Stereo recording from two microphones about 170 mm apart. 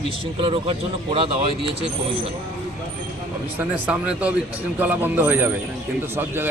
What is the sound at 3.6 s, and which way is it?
A man's voice, 10° right (ahead or behind).